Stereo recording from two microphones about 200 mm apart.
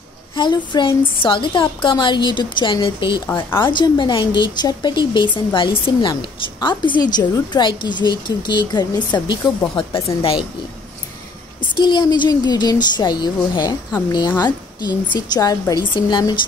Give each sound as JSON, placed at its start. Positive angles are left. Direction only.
{"t": 0.7, "sound": "a woman's voice", "side_deg": 25}
{"t": 11.7, "sound": "a woman's voice", "side_deg": 25}